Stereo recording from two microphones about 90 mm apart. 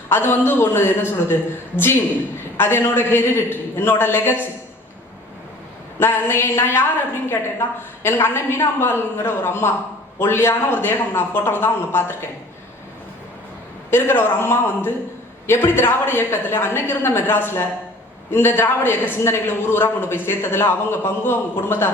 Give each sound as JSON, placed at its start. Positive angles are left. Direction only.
{"t": 0.1, "sound": "a man's voice", "side_deg": 25}
{"t": 6.0, "sound": "a man's voice", "side_deg": 25}
{"t": 8.0, "sound": "a man's voice", "side_deg": 25}
{"t": 13.9, "sound": "a man's voice", "side_deg": 25}